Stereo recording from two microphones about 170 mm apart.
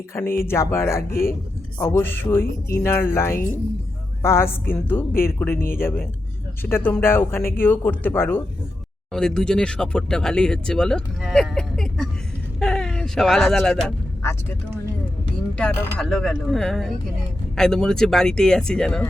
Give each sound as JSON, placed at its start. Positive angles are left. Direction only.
{"t": 0.4, "sound": "speech", "side_deg": 15}
{"t": 1.1, "sound": "a man's voice", "side_deg": 60}
{"t": 1.8, "sound": "speech", "side_deg": 15}
{"t": 5.5, "sound": "a man's voice", "side_deg": 60}
{"t": 5.8, "sound": "speech", "side_deg": 15}
{"t": 12.5, "sound": "a sound", "side_deg": 5}
{"t": 15.5, "sound": "speech", "side_deg": 5}